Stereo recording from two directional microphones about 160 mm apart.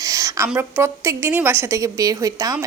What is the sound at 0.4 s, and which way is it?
A woman's voice, 15° right (ahead or behind).